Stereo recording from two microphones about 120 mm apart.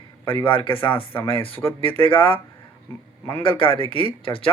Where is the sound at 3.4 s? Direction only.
45° left (ahead or behind).